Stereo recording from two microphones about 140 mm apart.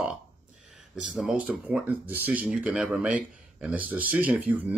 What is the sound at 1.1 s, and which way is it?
Speech, 5° right (ahead or behind).